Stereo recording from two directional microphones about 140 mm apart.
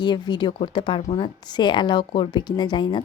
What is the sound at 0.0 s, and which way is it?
A woman's voice, 30° left (ahead or behind).